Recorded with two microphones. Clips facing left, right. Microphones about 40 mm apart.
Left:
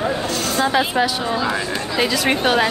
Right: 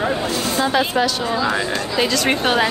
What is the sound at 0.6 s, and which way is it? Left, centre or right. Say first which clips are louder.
A woman's voice: even; centre.